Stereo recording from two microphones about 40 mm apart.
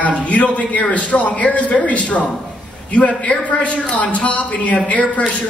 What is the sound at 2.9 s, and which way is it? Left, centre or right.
A man's voice, left.